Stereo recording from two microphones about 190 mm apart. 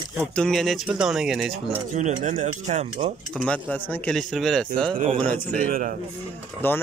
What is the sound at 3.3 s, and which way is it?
Speech, 5° left (ahead or behind).